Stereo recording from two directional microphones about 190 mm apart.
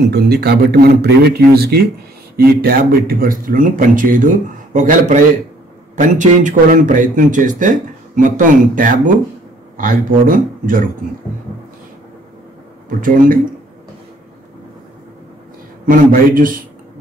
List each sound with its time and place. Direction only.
0.1 s a man's voice: 55° right (ahead or behind)
15.9 s speech: 45° right (ahead or behind)